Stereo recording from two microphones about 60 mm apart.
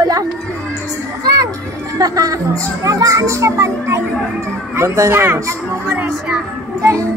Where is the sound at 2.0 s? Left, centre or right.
Right.